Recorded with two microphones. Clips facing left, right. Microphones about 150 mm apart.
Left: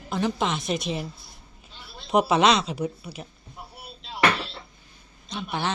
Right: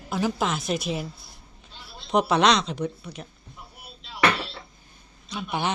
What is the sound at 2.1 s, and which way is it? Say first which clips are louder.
Speech: left 1 dB; 5° left (ahead or behind).